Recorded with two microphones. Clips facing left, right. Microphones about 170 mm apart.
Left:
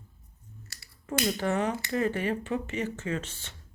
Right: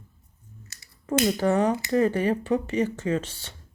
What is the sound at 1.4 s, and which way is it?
Speech, 35° right (ahead or behind).